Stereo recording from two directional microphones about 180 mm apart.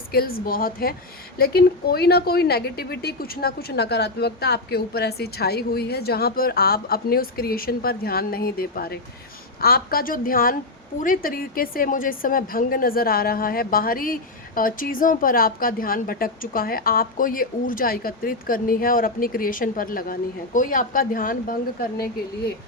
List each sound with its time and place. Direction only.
0.1 s a woman's voice: 55° left (ahead or behind)